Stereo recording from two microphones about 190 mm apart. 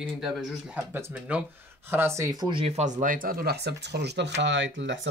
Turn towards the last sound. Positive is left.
turn(degrees=-75)  # may be behind; listen again after turning